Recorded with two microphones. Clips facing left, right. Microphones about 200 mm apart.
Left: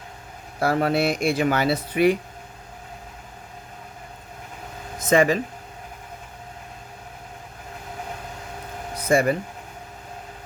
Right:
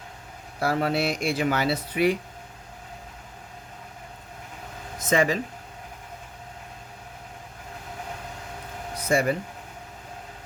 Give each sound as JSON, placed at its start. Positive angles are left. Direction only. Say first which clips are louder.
{"t": 0.6, "sound": "speech", "louder": "left 3 dB", "side_deg": 55}
{"t": 4.9, "sound": "speech", "louder": "left 4 dB", "side_deg": 55}
{"t": 9.0, "sound": "a sound", "louder": "left 4 dB", "side_deg": 55}